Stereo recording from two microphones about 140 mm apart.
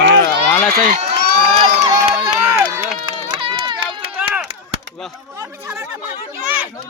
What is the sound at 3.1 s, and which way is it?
Run, 35° right (ahead or behind).